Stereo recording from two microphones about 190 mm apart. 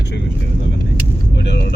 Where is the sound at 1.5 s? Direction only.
65° left (ahead or behind).